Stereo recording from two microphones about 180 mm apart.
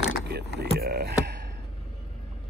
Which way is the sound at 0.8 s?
60° right (ahead or behind).